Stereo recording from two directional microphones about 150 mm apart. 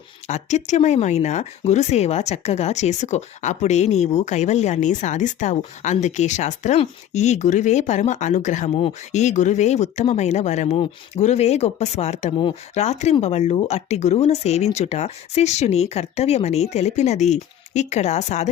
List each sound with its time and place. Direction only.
0.3 s speech: 50° left (ahead or behind)